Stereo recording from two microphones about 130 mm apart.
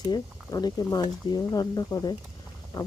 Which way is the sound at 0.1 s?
30° left (ahead or behind).